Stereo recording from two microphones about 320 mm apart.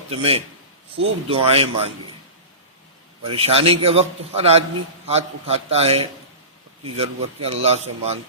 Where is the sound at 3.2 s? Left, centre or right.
Centre.